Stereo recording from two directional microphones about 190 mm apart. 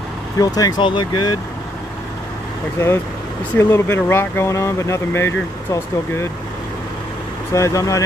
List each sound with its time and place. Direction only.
0.4 s speech: 20° left (ahead or behind)
3.5 s speech: 10° left (ahead or behind)
7.5 s speech: 15° left (ahead or behind)